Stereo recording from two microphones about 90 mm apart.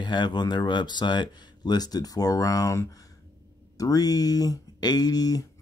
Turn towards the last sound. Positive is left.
turn(degrees=45)  # may be behind; listen again after turning